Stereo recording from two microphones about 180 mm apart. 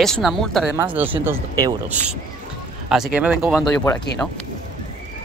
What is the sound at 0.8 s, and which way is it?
Speech, 10° right (ahead or behind).